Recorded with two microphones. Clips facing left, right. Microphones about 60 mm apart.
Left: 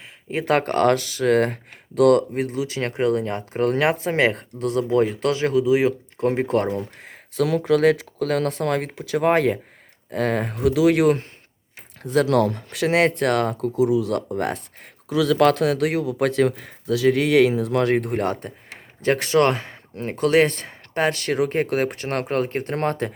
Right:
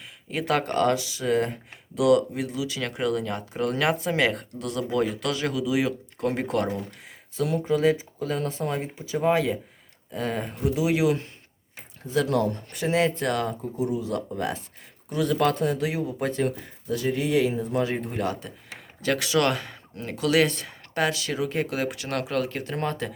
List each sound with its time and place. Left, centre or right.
0.3 s speech: left
7.3 s speech: left
12.0 s speech: left
15.1 s speech: left
19.0 s speech: left
21.1 s speech: left